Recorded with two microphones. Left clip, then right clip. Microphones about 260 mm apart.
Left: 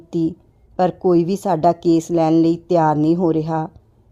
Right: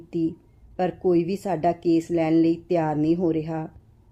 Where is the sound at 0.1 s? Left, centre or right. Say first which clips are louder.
Left 5 dB; left.